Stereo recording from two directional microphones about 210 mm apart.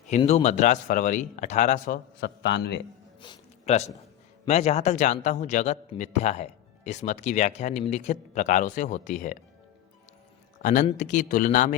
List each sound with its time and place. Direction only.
0.2 s a man's voice: 30° left (ahead or behind)
2.2 s a man's voice: 55° left (ahead or behind)
3.2 s a sound: 25° left (ahead or behind)
4.4 s a man's voice: 30° left (ahead or behind)
10.6 s a man's voice: 35° left (ahead or behind)